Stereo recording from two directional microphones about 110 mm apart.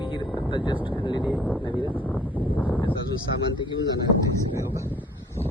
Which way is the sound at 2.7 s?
50° left (ahead or behind).